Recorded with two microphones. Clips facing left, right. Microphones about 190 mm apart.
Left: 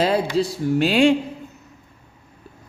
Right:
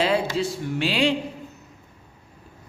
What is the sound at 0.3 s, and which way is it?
Speech, 40° left (ahead or behind).